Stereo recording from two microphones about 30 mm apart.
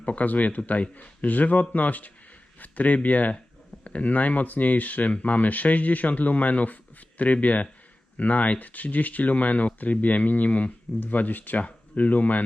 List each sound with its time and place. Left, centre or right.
0.0 s speech: left
11.0 s speech: left
11.9 s speech: left